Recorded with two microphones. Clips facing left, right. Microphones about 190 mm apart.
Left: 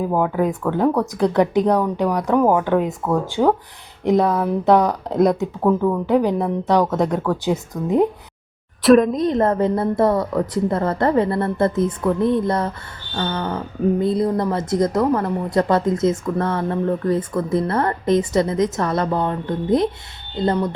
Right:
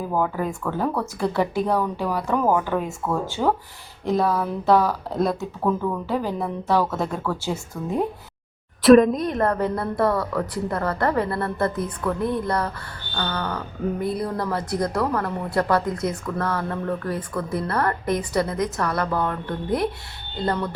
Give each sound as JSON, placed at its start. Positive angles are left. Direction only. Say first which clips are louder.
{"t": 0.0, "sound": "speech", "louder": "left 5 dB", "side_deg": 20}
{"t": 8.8, "sound": "a woman's voice", "louder": "even", "side_deg": 0}
{"t": 9.1, "sound": "a woman's voice", "louder": "left 5 dB", "side_deg": 20}